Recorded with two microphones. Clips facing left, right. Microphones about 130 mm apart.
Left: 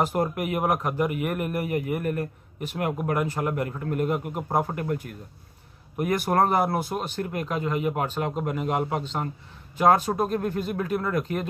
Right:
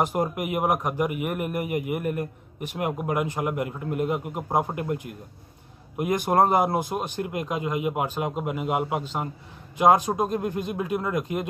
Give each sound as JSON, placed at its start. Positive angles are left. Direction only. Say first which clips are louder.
{"t": 0.0, "sound": "speech", "louder": "even", "side_deg": -15}